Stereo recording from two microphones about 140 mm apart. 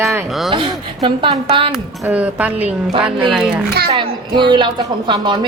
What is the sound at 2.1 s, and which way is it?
A woman's voice, 10° right (ahead or behind).